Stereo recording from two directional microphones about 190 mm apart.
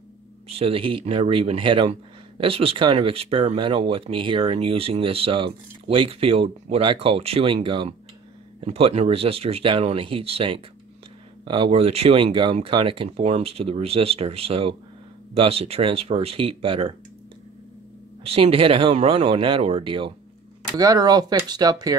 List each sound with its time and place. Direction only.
0.6 s speech: 30° right (ahead or behind)
18.2 s speech: 30° right (ahead or behind)